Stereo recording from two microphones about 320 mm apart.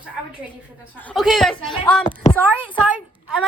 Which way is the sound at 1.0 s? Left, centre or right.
Centre.